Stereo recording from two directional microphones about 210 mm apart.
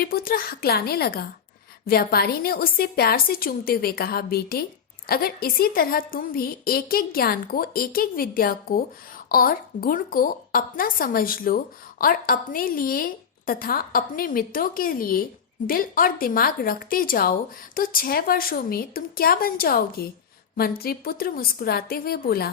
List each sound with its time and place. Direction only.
0.0 s a woman's voice: 45° left (ahead or behind)